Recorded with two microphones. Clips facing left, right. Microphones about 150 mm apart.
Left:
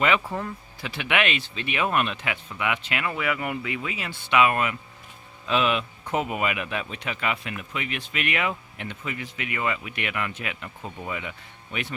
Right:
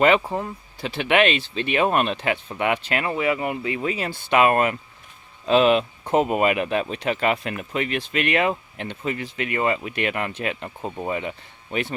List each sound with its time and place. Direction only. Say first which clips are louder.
0.2 s speech: right 3 dB; 25° right (ahead or behind)